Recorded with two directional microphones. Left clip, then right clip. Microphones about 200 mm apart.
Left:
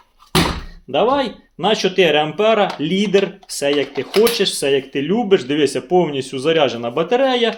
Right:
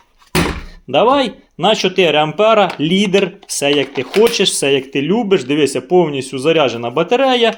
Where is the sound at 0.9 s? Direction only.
40° right (ahead or behind).